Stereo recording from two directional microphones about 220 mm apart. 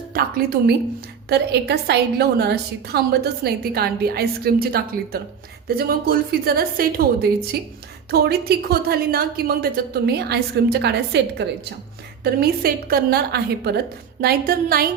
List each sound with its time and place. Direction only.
0.1 s a woman's voice: 40° right (ahead or behind)